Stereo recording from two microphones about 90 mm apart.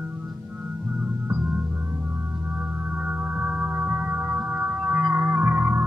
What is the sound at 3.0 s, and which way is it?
Music, 15° right (ahead or behind).